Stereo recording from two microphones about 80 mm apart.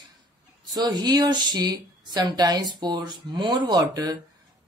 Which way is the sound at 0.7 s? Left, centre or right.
Right.